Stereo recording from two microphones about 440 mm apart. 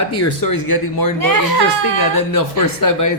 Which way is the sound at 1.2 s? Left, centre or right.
Right.